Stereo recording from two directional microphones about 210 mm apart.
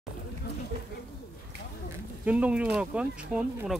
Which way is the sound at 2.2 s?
5° right (ahead or behind).